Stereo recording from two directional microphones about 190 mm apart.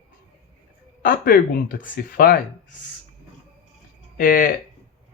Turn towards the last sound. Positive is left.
turn(degrees=45)  # may be behind; listen again after turning